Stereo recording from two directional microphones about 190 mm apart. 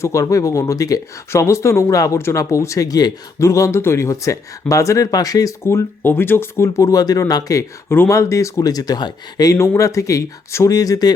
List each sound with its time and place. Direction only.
0.0 s speech: 15° left (ahead or behind)